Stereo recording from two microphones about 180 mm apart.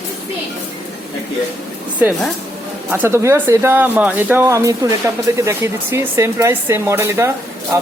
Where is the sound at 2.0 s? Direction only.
10° right (ahead or behind).